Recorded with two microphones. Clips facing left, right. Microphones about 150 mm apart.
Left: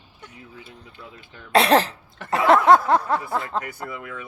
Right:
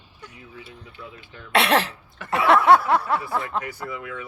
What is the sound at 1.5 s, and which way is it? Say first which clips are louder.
Cough: left 3 dB; 40° left (ahead or behind).